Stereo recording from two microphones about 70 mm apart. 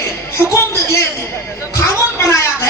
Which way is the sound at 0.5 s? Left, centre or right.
Left.